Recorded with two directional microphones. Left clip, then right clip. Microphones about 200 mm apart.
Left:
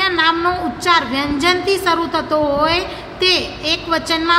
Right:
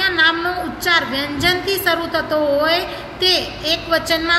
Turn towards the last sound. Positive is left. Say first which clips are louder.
# left 1 dB
turn(degrees=40)  # may be behind; listen again after turning